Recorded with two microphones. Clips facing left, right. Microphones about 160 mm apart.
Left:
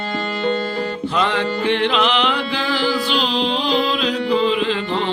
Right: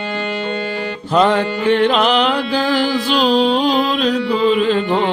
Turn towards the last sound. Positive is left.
turn(degrees=-45)  # may be behind; listen again after turning